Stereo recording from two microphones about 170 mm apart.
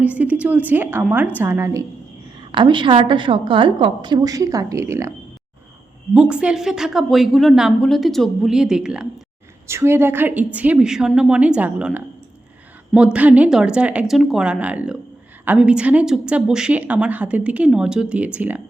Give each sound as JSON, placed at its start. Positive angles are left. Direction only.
{"t": 0.0, "sound": "a woman's voice", "side_deg": -10}
{"t": 2.5, "sound": "a woman's voice", "side_deg": -30}
{"t": 6.1, "sound": "a woman's voice", "side_deg": -5}
{"t": 9.6, "sound": "a woman's voice", "side_deg": -15}
{"t": 13.1, "sound": "a woman's voice", "side_deg": -10}